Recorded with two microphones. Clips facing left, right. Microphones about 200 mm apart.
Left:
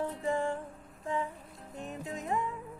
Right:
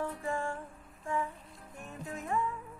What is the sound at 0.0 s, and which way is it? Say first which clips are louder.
Music: left 3 dB; 20° left (ahead or behind).